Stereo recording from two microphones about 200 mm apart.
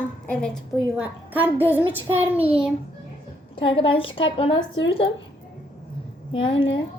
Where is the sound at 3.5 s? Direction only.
25° left (ahead or behind).